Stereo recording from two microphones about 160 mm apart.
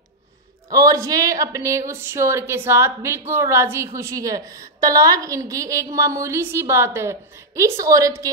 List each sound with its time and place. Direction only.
0.7 s a woman's voice: 20° right (ahead or behind)